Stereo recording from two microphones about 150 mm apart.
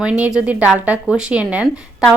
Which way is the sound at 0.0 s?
5° right (ahead or behind).